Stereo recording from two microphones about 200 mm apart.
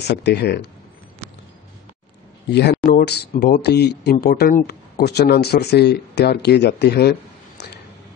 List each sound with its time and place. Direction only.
0.0 s speech: 55° left (ahead or behind)
2.5 s speech: 55° left (ahead or behind)
2.8 s speech: 45° left (ahead or behind)